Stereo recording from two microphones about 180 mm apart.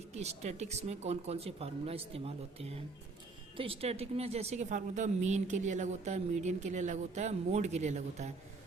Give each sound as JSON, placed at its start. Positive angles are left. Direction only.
{"t": 0.2, "sound": "speech", "side_deg": -40}